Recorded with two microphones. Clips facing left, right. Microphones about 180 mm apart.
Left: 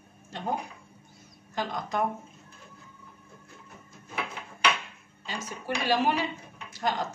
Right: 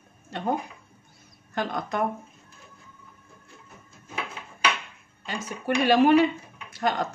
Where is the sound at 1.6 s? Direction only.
60° right (ahead or behind).